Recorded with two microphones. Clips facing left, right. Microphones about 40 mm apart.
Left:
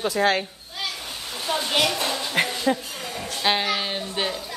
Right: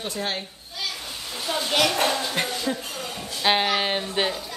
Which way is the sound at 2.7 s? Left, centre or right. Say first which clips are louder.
Left 5 dB; left.